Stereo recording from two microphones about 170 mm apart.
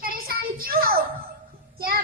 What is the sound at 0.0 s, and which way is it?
Child singing, 60° right (ahead or behind).